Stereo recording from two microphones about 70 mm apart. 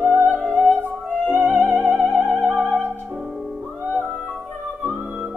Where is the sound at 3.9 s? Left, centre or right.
Centre.